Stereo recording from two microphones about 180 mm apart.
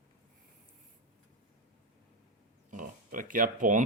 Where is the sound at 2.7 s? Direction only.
50° right (ahead or behind).